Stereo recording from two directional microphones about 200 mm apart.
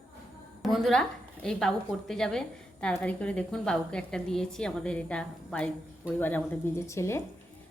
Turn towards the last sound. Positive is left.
turn(degrees=15)  # may be behind; listen again after turning